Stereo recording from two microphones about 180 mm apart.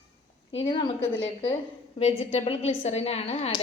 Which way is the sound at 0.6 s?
30° left (ahead or behind).